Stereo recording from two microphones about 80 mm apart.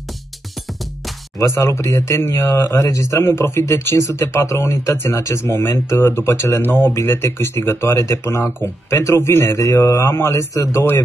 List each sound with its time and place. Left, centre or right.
1.4 s speech: left